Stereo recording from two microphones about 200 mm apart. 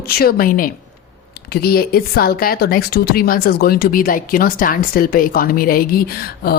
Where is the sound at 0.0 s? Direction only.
50° left (ahead or behind).